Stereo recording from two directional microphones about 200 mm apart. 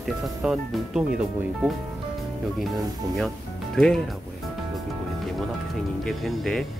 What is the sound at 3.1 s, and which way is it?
Music, centre (ahead or behind).